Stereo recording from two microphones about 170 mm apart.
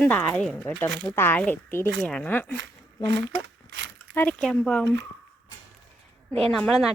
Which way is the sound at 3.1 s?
90° right.